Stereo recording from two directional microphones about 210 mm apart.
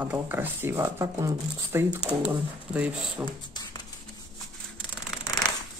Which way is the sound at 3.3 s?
20° left (ahead or behind).